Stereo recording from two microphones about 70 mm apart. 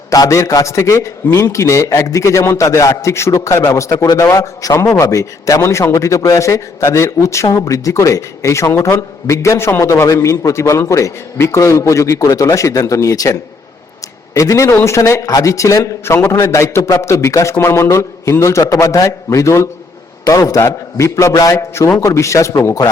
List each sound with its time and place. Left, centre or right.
0.1 s a man's voice: left
5.5 s a man's voice: left
14.3 s a man's voice: left
16.1 s a man's voice: left
20.7 s a man's voice: left